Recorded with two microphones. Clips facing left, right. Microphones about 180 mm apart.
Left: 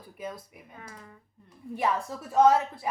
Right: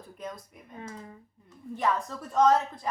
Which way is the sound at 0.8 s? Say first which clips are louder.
Right 6 dB; 25° right (ahead or behind).